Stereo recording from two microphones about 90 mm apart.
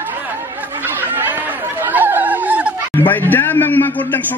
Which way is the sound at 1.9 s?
20° right (ahead or behind).